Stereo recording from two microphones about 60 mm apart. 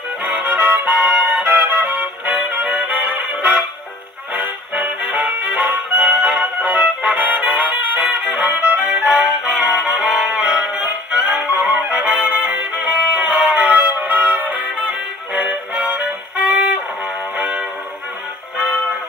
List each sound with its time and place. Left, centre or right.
0.2 s music: right
4.4 s music: right